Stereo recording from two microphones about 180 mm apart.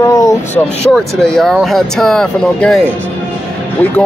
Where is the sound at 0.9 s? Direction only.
Centre (ahead or behind).